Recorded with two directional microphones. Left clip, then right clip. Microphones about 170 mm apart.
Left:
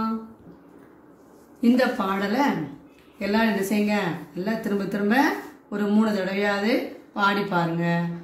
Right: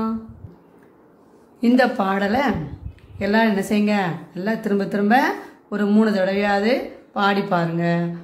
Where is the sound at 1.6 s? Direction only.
55° right (ahead or behind).